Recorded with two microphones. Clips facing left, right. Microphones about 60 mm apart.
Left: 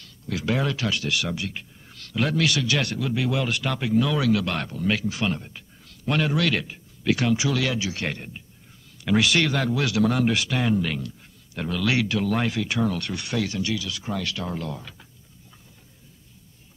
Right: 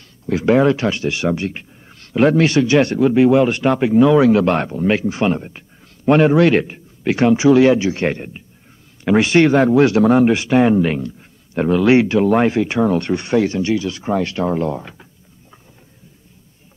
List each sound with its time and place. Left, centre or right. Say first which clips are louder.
0.3 s speech: right 12 dB; right